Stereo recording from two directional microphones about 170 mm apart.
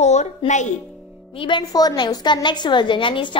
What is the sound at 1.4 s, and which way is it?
A woman's voice, 25° left (ahead or behind).